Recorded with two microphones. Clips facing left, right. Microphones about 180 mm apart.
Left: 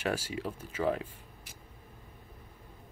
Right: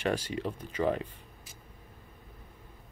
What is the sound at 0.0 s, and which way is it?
Speech, 5° left (ahead or behind).